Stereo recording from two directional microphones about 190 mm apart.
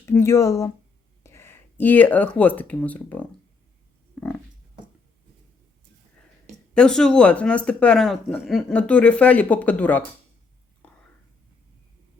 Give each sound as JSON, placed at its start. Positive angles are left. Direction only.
{"t": 0.0, "sound": "speech", "side_deg": 15}
{"t": 4.1, "sound": "a sound", "side_deg": 5}
{"t": 6.7, "sound": "speech", "side_deg": 5}
{"t": 10.8, "sound": "whispering", "side_deg": 5}